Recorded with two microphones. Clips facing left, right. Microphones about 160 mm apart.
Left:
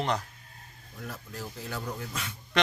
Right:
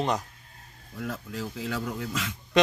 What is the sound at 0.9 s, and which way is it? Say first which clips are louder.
Speech: right 6 dB; 90° right.